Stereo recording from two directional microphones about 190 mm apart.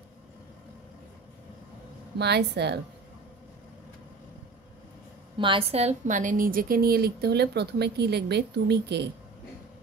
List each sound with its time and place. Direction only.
2.1 s a woman's voice: 60° right (ahead or behind)
5.4 s a woman's voice: 30° right (ahead or behind); by 9.1 s 60° right (ahead or behind)